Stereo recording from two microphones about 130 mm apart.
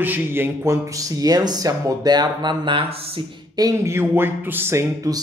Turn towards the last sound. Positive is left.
turn(degrees=-25)  # may be behind; listen again after turning